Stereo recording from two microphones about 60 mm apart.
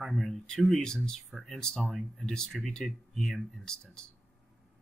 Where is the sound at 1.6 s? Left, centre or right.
Centre.